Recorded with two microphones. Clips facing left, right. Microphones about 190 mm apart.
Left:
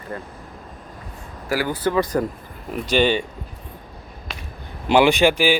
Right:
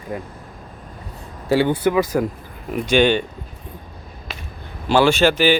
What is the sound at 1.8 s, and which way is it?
Speech, 10° right (ahead or behind).